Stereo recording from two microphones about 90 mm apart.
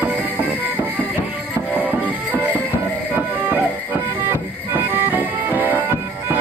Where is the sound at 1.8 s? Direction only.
20° right (ahead or behind).